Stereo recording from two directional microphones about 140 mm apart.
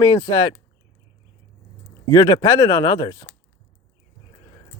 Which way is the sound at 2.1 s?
25° left (ahead or behind).